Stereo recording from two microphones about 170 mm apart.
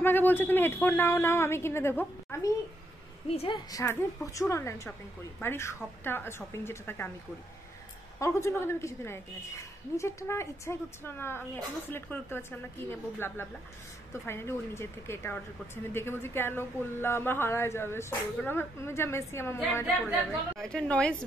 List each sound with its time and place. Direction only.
0.0 s speech: 10° left (ahead or behind)
3.3 s a woman's voice: 35° left (ahead or behind)
3.8 s speech: 15° left (ahead or behind)
8.2 s a woman's voice: 15° left (ahead or behind)